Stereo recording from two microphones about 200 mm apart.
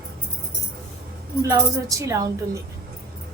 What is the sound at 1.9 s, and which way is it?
Speech, 15° right (ahead or behind).